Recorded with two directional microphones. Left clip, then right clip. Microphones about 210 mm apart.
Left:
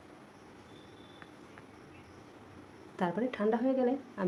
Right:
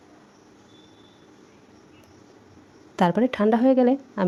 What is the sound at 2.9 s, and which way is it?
Speech, 50° right (ahead or behind).